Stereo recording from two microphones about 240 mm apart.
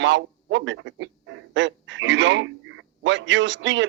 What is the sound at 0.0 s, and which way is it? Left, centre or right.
A man's voice, right.